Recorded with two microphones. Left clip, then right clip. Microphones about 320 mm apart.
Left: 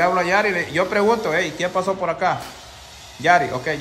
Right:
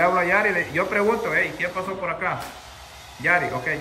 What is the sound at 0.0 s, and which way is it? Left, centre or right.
A man's voice, centre.